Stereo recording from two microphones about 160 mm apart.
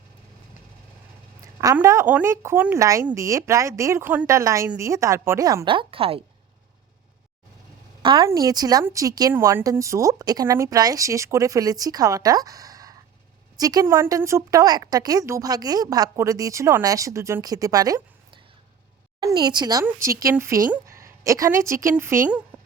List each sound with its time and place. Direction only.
1.7 s a woman's voice: 15° right (ahead or behind); by 6.2 s 35° right (ahead or behind)
8.0 s a woman's voice: 30° right (ahead or behind); by 22.4 s 15° right (ahead or behind)